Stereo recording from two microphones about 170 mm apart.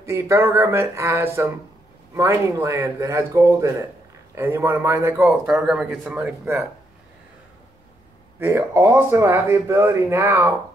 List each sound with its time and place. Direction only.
0.0 s speech: 15° right (ahead or behind)
5.3 s speech: centre (ahead or behind)
8.4 s speech: 15° right (ahead or behind)